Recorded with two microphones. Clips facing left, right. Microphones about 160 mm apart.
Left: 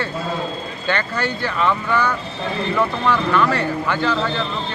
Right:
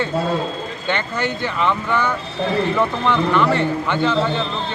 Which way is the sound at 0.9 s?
20° right (ahead or behind).